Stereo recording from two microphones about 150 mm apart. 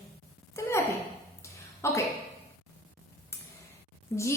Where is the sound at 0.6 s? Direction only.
20° left (ahead or behind).